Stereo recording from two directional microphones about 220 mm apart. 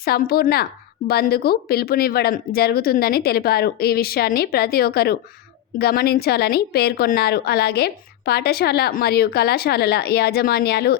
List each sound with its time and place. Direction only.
0.0 s a woman's voice: 45° left (ahead or behind)